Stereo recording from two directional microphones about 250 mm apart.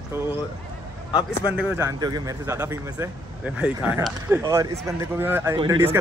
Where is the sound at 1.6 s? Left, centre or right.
Centre.